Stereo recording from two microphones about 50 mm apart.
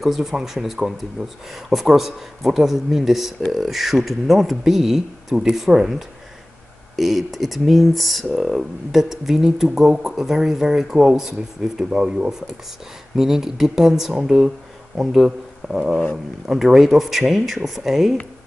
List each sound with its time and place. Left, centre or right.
0.0 s speech: centre
11.9 s speech: right
13.1 s speech: centre